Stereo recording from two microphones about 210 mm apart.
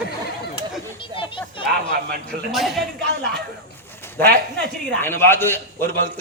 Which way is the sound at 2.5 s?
Centre (ahead or behind).